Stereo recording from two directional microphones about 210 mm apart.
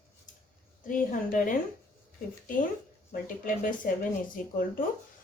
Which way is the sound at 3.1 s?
40° left (ahead or behind).